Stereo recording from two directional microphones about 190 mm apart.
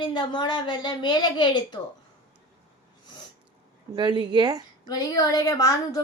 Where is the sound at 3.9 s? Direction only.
25° right (ahead or behind).